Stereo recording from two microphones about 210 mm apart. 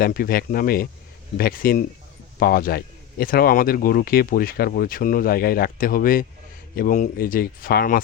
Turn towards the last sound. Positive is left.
turn(degrees=45)  # may be behind; listen again after turning